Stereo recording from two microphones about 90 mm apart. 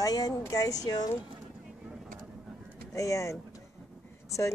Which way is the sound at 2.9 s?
35° left (ahead or behind).